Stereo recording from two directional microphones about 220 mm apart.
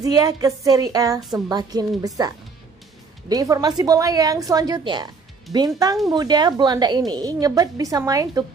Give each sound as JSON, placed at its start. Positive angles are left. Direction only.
{"t": 0.0, "sound": "a woman's voice", "side_deg": -15}